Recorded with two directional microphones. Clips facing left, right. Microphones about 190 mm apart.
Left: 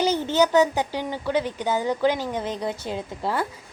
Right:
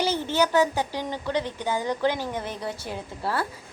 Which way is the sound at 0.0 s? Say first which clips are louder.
Left 3 dB; 15° left (ahead or behind).